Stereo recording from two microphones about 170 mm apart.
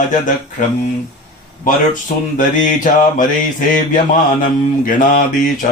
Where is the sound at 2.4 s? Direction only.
50° left (ahead or behind).